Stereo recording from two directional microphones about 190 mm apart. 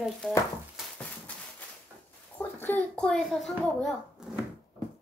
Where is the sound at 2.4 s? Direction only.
10° left (ahead or behind).